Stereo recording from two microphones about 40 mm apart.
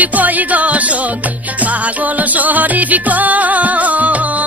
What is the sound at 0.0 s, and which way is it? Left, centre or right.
Music, right.